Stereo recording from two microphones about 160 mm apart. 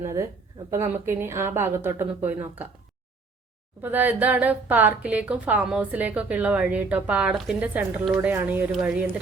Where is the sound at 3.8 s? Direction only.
10° right (ahead or behind).